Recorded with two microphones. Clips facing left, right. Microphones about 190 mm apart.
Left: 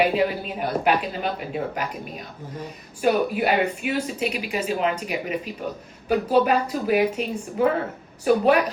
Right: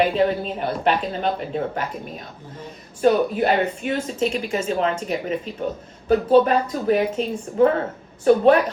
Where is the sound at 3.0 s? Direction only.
10° left (ahead or behind).